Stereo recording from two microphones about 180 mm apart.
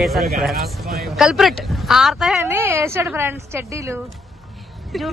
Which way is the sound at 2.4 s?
10° right (ahead or behind).